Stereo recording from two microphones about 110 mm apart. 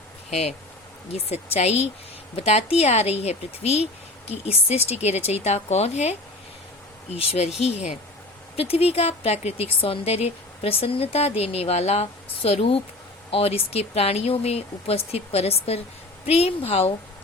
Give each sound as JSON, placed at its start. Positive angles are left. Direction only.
{"t": 0.3, "sound": "speech", "side_deg": 75}
{"t": 7.2, "sound": "speech", "side_deg": 75}
{"t": 7.6, "sound": "speech", "side_deg": 90}
{"t": 8.5, "sound": "speech", "side_deg": 65}